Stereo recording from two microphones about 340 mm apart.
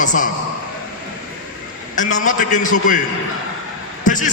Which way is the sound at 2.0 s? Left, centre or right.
Left.